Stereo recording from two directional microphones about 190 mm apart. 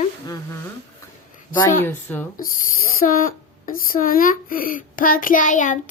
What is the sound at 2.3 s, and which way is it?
Speech, 50° left (ahead or behind).